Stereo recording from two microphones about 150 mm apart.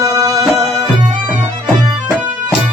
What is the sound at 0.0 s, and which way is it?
Music, 20° right (ahead or behind).